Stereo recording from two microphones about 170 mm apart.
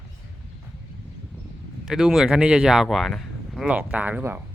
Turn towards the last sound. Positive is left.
turn(degrees=-10)  # may be behind; listen again after turning